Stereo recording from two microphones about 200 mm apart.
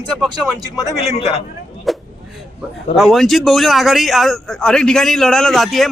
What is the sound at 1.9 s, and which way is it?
Vehicle, centre (ahead or behind).